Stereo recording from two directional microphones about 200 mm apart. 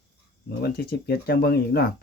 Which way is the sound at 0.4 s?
50° left (ahead or behind).